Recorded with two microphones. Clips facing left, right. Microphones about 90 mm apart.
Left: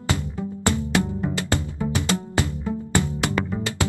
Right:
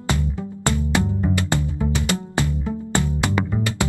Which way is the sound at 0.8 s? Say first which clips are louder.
Right 1 dB; 20° right (ahead or behind).